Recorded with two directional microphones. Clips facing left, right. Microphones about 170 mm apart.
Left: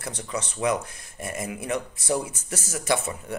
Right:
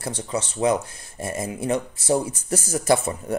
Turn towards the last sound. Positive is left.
turn(degrees=-40)  # may be behind; listen again after turning